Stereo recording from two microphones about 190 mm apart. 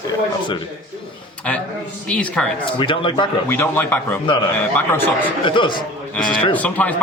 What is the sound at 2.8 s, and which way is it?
Speech, 25° left (ahead or behind).